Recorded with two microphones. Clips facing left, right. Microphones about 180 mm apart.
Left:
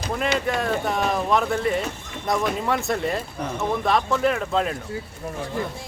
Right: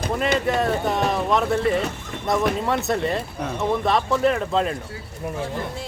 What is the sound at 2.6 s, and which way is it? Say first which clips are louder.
Speech: right 1 dB; centre (ahead or behind).